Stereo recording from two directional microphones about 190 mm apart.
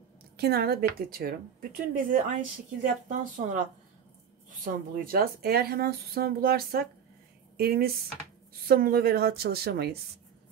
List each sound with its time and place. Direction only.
0.4 s a woman's voice: 55° right (ahead or behind)